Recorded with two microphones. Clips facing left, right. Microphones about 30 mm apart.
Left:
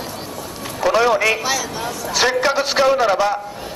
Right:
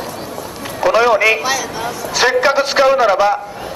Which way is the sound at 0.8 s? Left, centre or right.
Centre.